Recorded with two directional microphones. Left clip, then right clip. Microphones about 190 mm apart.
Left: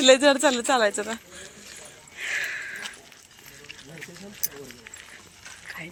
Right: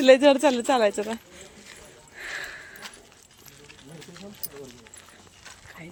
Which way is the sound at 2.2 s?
25° right (ahead or behind).